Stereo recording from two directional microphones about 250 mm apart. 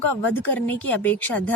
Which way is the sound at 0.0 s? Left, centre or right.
Centre.